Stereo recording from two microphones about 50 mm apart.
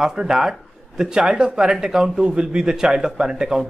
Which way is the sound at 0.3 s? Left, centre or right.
Centre.